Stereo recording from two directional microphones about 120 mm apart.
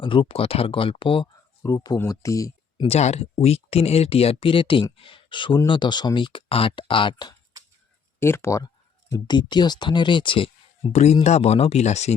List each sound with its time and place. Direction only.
0.0 s speech: 45° left (ahead or behind)
1.6 s speech: 35° left (ahead or behind)
2.8 s speech: 65° left (ahead or behind); by 7.3 s 40° left (ahead or behind)
8.2 s speech: 20° left (ahead or behind); by 10.9 s 45° left (ahead or behind)
10.9 s speech: 65° left (ahead or behind)